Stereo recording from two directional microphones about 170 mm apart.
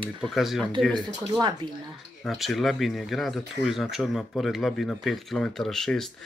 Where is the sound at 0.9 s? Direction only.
25° right (ahead or behind).